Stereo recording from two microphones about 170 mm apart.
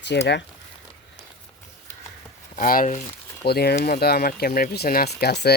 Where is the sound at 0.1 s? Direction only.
75° left (ahead or behind).